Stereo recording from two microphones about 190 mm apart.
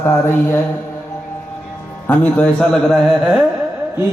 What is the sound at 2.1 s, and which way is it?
A man's voice, 5° left (ahead or behind).